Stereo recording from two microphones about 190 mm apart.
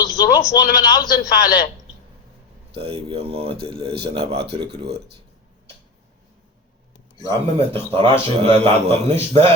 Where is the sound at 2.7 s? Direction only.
30° right (ahead or behind).